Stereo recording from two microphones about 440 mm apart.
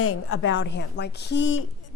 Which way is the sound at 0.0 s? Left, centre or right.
Left.